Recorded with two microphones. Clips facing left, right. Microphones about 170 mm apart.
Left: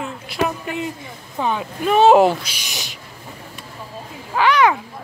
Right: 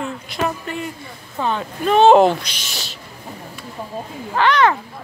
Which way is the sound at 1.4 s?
10° left (ahead or behind).